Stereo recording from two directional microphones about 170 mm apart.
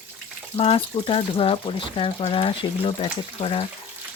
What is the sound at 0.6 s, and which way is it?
Speech, 35° left (ahead or behind).